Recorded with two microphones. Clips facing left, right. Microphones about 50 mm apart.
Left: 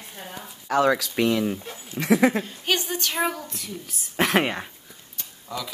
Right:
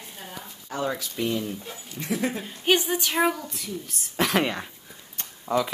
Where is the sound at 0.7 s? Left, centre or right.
Left.